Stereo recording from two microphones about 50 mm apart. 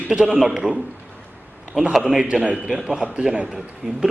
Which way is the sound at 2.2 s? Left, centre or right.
Centre.